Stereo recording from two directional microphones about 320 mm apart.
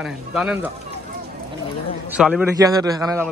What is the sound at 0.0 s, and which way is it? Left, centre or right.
Speech, centre.